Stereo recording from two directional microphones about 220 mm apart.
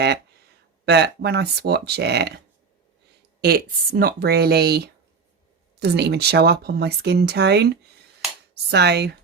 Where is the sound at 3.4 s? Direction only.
45° right (ahead or behind).